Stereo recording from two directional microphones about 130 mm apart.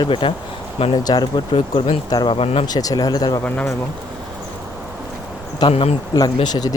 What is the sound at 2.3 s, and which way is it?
Speech, 50° left (ahead or behind).